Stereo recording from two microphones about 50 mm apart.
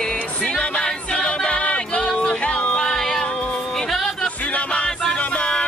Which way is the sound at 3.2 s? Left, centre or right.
Left.